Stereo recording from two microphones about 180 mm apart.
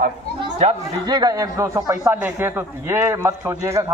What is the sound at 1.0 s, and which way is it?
A man's voice, 20° right (ahead or behind).